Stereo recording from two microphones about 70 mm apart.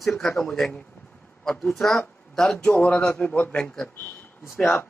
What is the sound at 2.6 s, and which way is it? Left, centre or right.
Speech, centre.